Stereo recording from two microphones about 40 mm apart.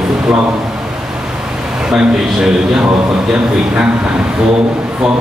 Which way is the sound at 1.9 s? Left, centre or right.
Centre.